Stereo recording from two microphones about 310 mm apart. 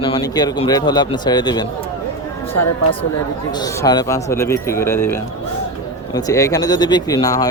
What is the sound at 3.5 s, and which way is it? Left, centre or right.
Speech, centre.